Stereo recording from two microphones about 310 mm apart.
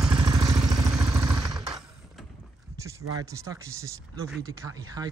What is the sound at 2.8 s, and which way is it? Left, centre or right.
Speech, centre.